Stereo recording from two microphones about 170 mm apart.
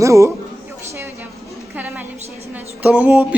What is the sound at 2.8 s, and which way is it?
Speech, 10° right (ahead or behind).